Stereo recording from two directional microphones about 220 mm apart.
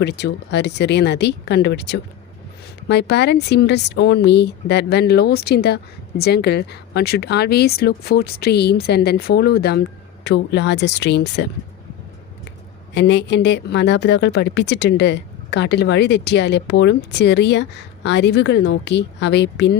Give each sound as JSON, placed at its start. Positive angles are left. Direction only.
{"t": 0.0, "sound": "speech", "side_deg": 50}
{"t": 12.9, "sound": "speech", "side_deg": 50}